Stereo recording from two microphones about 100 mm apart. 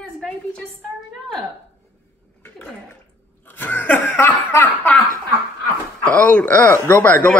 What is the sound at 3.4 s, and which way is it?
Cough, 20° left (ahead or behind).